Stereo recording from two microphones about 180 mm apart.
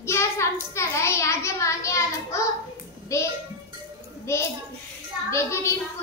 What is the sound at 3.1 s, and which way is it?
Music, 15° left (ahead or behind).